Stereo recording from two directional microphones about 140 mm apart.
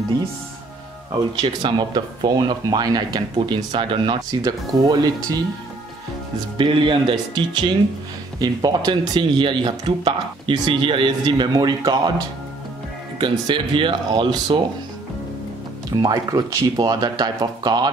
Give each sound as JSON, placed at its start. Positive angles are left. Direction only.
{"t": 1.3, "sound": "speech", "side_deg": -35}
{"t": 6.6, "sound": "speech", "side_deg": -35}
{"t": 13.2, "sound": "speech", "side_deg": -35}
{"t": 16.0, "sound": "speech", "side_deg": -25}